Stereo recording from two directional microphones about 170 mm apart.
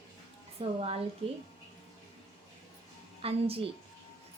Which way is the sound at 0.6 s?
30° right (ahead or behind).